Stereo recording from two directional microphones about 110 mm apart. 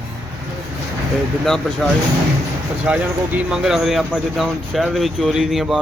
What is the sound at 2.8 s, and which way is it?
A man's voice, 10° right (ahead or behind).